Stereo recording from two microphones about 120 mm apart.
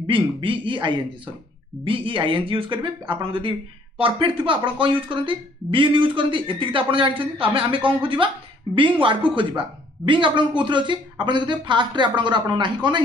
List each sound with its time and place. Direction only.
0.0 s speech: 45° right (ahead or behind)